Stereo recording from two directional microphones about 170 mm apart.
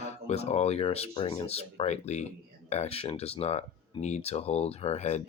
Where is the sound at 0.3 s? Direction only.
40° left (ahead or behind).